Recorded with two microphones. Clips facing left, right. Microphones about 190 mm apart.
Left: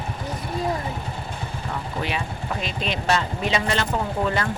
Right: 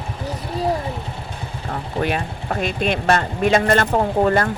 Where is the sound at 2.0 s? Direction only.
50° right (ahead or behind).